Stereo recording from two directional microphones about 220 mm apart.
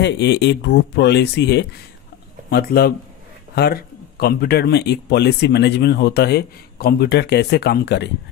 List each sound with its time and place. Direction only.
0.0 s speech: 50° left (ahead or behind)